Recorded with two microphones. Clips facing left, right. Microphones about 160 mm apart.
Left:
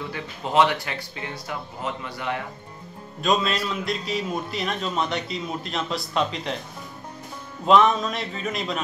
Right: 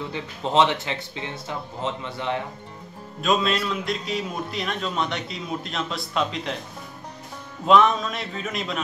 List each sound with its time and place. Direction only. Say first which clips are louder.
0.1 s speech: right 1 dB; 25° right (ahead or behind)
3.2 s a man's voice: right 1 dB; centre (ahead or behind)
7.6 s a man's voice: even; centre (ahead or behind)